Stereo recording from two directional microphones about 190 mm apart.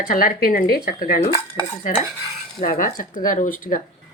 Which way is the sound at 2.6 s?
45° left (ahead or behind).